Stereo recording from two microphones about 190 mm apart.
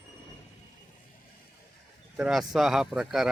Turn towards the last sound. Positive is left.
turn(degrees=-5)  # may be behind; listen again after turning